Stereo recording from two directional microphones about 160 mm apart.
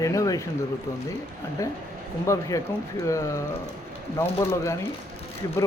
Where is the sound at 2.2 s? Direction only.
20° left (ahead or behind).